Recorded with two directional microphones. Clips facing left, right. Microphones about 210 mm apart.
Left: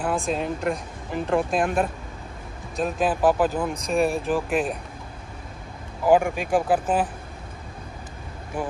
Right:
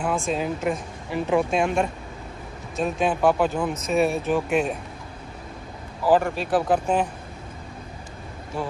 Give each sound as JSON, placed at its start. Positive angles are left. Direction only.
{"t": 0.0, "sound": "speech", "side_deg": 0}
{"t": 6.0, "sound": "speech", "side_deg": 15}
{"t": 8.6, "sound": "speech", "side_deg": 15}